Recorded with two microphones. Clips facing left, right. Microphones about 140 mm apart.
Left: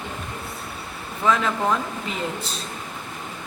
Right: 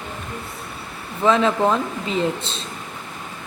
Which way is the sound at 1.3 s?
25° right (ahead or behind).